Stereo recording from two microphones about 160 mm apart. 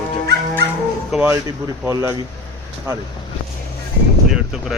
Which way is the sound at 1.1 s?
10° right (ahead or behind).